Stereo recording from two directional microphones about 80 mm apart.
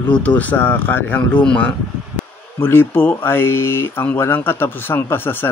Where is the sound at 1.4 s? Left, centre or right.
Centre.